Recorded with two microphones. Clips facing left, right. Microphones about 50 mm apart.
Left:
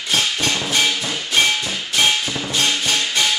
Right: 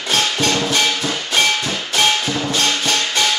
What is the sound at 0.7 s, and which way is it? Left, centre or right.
Music, centre.